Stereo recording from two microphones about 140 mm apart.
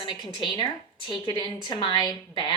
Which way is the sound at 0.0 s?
30° left (ahead or behind).